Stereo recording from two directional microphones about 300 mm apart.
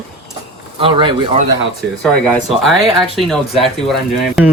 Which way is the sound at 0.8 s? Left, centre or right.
Centre.